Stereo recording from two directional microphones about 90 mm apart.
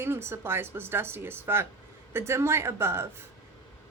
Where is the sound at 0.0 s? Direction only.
25° right (ahead or behind).